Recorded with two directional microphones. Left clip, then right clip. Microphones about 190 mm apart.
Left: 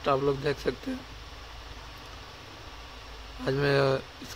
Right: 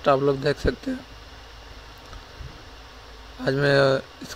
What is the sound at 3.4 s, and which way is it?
Speech, 20° right (ahead or behind).